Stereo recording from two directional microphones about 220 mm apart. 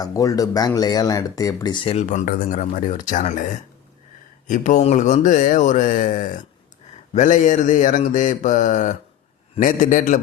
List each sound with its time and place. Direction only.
0.0 s speech: 15° left (ahead or behind); by 10.2 s 35° left (ahead or behind)